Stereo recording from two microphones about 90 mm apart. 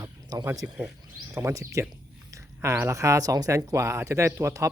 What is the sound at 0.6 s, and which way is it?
Speech, 10° right (ahead or behind).